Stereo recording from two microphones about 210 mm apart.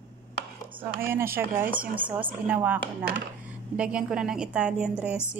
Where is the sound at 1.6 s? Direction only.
40° right (ahead or behind).